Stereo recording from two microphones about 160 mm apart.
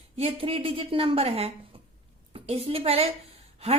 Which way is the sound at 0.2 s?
35° right (ahead or behind).